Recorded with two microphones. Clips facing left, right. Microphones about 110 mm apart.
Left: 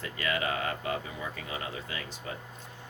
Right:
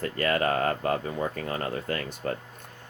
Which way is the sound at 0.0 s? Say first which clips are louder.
Right 6 dB; 45° right (ahead or behind).